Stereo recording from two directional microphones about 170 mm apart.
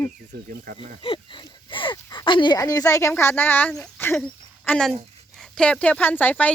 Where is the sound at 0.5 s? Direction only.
55° right (ahead or behind).